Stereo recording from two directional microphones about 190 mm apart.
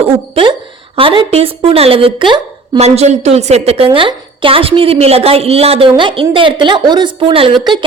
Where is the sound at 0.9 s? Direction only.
25° right (ahead or behind).